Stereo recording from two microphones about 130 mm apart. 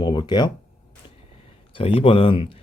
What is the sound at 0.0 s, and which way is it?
Speech, 35° left (ahead or behind).